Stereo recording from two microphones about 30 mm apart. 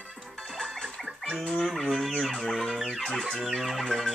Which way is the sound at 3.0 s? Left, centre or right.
Centre.